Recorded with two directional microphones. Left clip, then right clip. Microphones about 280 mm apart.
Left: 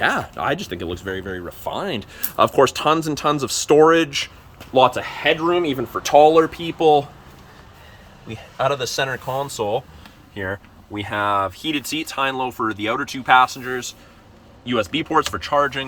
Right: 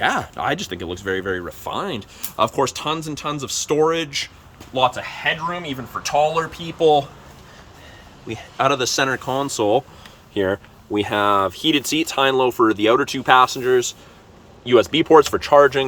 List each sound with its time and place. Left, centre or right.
0.0 s speech: centre
4.7 s speech: left; by 7.0 s centre
8.3 s speech: centre
10.3 s speech: right